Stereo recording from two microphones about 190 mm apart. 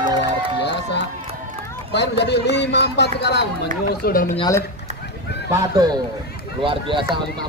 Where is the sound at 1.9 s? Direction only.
65° left (ahead or behind).